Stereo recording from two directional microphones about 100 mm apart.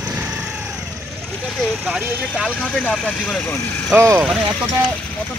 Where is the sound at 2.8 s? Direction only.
10° left (ahead or behind).